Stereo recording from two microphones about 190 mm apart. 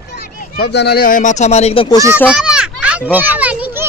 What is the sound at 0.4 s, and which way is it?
Speech, 60° left (ahead or behind).